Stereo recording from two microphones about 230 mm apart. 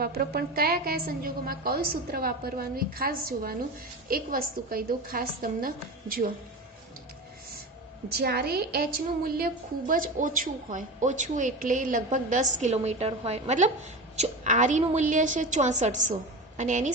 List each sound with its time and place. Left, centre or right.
0.0 s a woman's voice: right
8.1 s a woman's voice: right